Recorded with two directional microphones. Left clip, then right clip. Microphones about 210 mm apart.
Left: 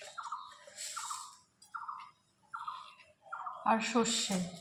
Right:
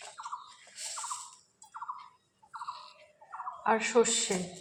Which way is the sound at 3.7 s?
25° right (ahead or behind).